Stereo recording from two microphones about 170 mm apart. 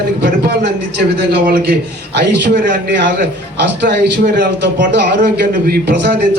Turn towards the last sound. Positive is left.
turn(degrees=-75)  # may be behind; listen again after turning